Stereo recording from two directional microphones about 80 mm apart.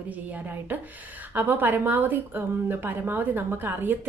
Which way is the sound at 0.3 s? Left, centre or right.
Right.